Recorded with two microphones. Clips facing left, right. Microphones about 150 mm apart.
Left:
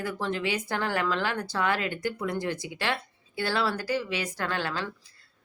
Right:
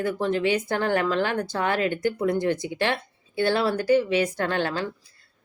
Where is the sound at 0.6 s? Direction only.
50° right (ahead or behind).